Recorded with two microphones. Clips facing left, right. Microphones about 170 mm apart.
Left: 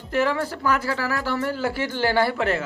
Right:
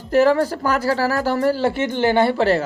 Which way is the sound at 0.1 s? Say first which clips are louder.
Right 8 dB; 40° right (ahead or behind).